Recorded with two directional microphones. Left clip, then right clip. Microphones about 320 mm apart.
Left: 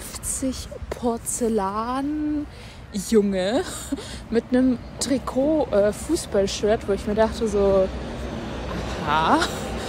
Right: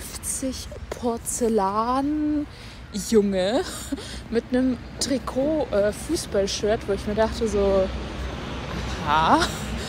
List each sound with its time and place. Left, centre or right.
0.4 s speech: centre
7.8 s vehicle: left
8.7 s a sound: centre